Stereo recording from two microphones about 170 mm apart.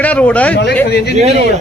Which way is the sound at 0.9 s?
75° left (ahead or behind).